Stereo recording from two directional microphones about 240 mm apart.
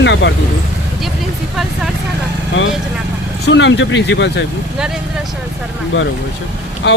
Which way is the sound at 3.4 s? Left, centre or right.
Left.